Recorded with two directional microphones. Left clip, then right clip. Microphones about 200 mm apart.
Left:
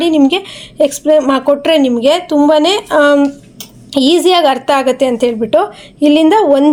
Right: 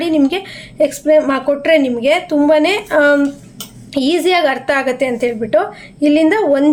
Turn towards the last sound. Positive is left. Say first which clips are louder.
# left 4 dB
turn(degrees=25)  # may be behind; listen again after turning